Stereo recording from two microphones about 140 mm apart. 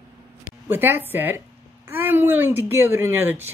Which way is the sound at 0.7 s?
15° right (ahead or behind).